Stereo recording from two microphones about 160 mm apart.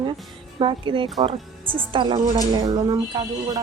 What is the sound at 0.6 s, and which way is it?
A woman's voice, 30° right (ahead or behind).